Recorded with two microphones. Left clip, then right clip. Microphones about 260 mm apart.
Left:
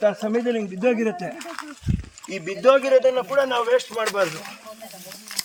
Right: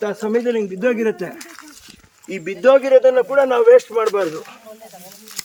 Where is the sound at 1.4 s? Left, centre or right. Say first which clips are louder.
Left 5 dB; left.